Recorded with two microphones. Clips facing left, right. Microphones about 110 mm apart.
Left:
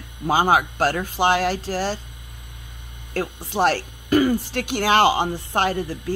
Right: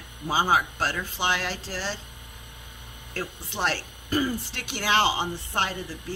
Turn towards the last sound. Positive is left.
turn(degrees=45)  # may be behind; listen again after turning